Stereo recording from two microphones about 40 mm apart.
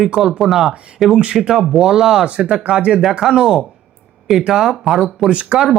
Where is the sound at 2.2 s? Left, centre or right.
Right.